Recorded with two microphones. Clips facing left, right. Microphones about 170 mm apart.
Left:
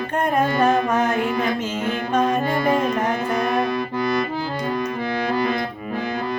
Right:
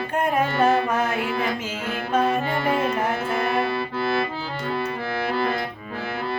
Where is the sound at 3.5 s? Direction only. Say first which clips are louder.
Left 2 dB; 15° left (ahead or behind).